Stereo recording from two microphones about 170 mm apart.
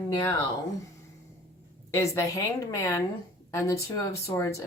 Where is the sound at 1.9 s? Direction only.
15° left (ahead or behind).